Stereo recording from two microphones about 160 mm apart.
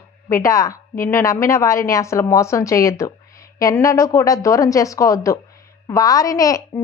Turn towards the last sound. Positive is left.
turn(degrees=20)  # may be behind; listen again after turning